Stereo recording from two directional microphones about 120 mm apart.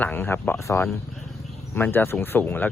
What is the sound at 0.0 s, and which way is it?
Speech, 15° left (ahead or behind).